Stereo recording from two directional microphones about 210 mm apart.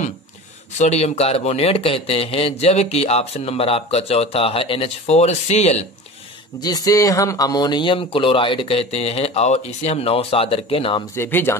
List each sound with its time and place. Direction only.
0.7 s speech: 30° left (ahead or behind)
6.6 s speech: 20° left (ahead or behind)
11.1 s speech: 10° left (ahead or behind)